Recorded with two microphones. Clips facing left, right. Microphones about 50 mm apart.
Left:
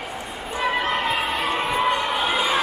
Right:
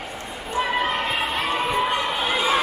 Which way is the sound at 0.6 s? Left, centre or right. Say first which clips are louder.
Even; centre.